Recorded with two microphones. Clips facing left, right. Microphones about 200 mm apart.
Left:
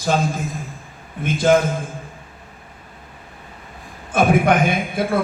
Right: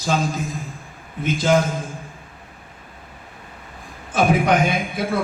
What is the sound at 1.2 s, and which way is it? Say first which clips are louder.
Speech: left 3 dB; 55° left (ahead or behind).